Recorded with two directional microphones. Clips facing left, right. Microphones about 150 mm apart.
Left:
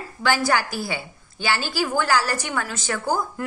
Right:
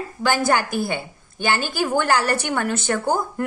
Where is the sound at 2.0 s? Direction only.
55° right (ahead or behind).